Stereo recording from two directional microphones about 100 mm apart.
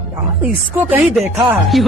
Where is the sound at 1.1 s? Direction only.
5° right (ahead or behind).